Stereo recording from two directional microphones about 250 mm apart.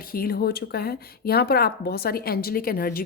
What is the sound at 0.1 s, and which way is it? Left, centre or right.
A woman's voice, left.